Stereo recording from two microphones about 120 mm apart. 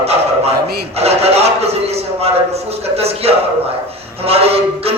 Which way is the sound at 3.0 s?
55° right (ahead or behind).